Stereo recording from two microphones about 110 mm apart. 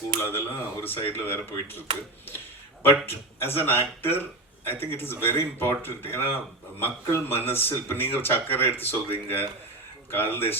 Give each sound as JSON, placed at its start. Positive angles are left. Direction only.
{"t": 0.2, "sound": "speech", "side_deg": 20}
{"t": 2.8, "sound": "speech", "side_deg": 20}